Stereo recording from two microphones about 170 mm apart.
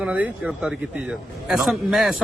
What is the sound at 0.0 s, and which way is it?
A man's voice, 5° right (ahead or behind).